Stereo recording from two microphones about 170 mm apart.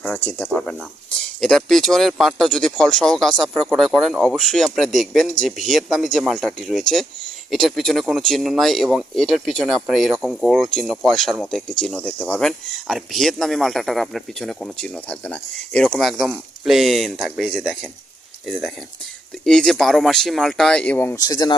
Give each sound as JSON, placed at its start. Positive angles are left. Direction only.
{"t": 0.0, "sound": "speech", "side_deg": 5}
{"t": 19.5, "sound": "speech", "side_deg": 5}